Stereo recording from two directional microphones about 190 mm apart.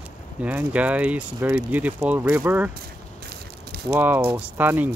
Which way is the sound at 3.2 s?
55° right (ahead or behind).